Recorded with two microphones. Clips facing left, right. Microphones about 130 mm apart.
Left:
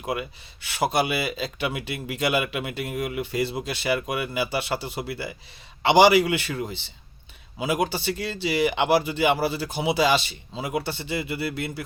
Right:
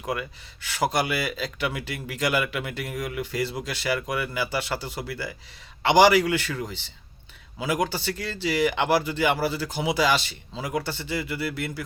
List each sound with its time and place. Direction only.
0.0 s speech: 25° left (ahead or behind)